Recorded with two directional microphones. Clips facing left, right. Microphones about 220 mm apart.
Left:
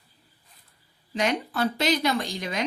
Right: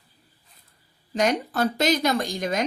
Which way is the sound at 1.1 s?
45° right (ahead or behind).